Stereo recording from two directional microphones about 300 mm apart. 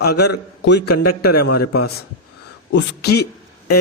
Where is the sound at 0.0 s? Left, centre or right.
Left.